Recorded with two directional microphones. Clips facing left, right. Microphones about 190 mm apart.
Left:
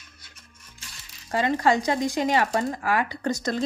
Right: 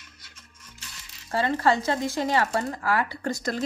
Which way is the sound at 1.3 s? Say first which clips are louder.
Left 1 dB; 15° left (ahead or behind).